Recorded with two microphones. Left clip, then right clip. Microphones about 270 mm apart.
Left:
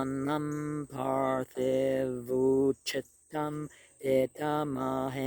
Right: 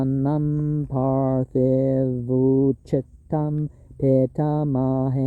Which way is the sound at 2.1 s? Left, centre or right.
Left.